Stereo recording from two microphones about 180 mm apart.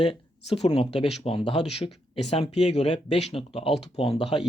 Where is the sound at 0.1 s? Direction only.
35° left (ahead or behind).